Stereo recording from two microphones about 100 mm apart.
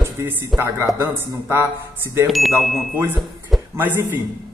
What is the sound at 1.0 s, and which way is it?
A man's voice, 25° right (ahead or behind).